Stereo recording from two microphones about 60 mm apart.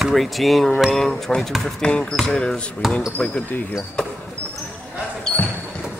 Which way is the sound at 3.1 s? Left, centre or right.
Left.